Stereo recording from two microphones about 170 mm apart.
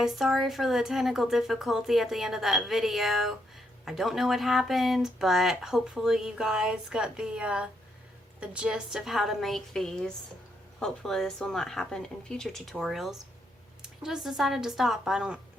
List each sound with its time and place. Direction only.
0.0 s speech: centre (ahead or behind)